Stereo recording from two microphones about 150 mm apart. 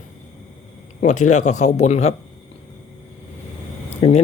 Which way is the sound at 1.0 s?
55° left (ahead or behind).